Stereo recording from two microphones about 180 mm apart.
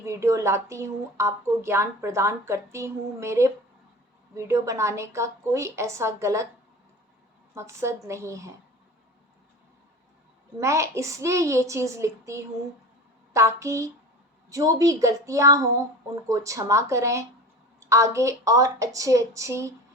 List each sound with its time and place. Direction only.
0.0 s a woman's voice: 15° right (ahead or behind)
7.5 s a woman's voice: 15° right (ahead or behind)
10.6 s a woman's voice: 15° right (ahead or behind)